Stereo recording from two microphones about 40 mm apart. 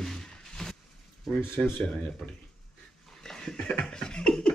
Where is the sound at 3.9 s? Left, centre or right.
Centre.